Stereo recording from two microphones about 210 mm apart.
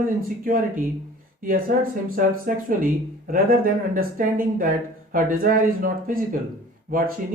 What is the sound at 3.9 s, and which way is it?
Speech, 40° right (ahead or behind).